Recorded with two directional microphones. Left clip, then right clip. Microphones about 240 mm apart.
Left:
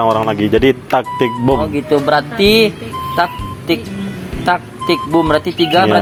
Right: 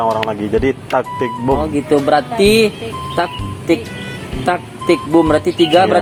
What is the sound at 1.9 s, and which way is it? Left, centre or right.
Speech, centre.